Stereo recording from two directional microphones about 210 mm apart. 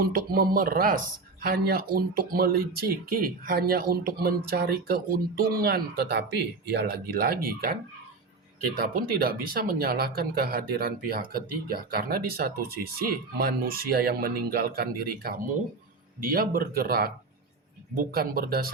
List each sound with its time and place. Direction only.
0.0 s speech: 45° right (ahead or behind)